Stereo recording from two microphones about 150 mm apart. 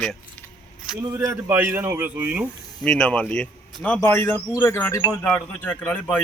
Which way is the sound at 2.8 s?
5° left (ahead or behind).